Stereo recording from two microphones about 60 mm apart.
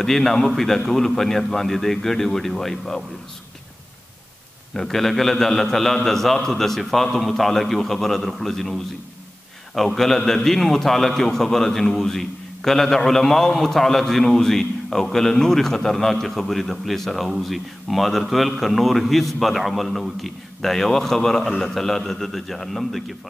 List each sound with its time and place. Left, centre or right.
0.0 s a man's voice: centre
4.7 s a man's voice: centre